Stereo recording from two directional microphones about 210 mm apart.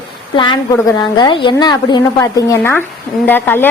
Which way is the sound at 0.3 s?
20° left (ahead or behind).